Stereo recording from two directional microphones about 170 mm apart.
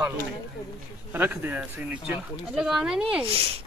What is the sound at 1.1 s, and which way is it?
Speech, 10° right (ahead or behind).